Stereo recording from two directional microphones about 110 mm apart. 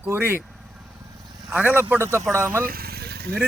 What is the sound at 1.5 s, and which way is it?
Speech, 15° right (ahead or behind).